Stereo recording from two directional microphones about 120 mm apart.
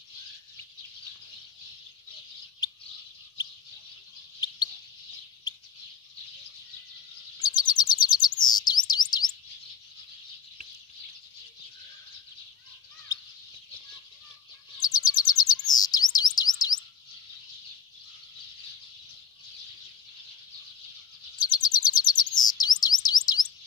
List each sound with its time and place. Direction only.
7.3 s chirp: 35° left (ahead or behind)
14.8 s chirp: 35° left (ahead or behind)
21.5 s chirp: 35° left (ahead or behind)